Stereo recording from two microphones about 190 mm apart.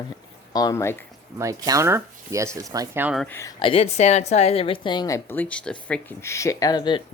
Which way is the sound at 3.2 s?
10° left (ahead or behind).